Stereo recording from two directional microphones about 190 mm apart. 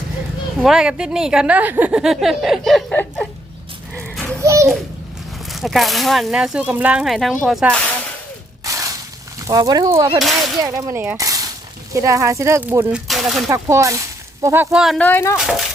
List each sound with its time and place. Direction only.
0.6 s a woman's voice: 5° right (ahead or behind)
4.1 s children playing: 5° left (ahead or behind)
4.4 s children playing: 15° right (ahead or behind)
5.5 s a woman's voice: centre (ahead or behind)
8.6 s a sound: 15° right (ahead or behind)
9.5 s speech: 20° right (ahead or behind)
12.9 s a woman's voice: centre (ahead or behind)
13.5 s a woman's voice: 15° right (ahead or behind); by 15.4 s 10° left (ahead or behind)
15.4 s a woman's voice: centre (ahead or behind)